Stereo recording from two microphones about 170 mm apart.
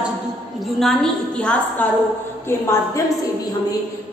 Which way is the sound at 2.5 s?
15° left (ahead or behind).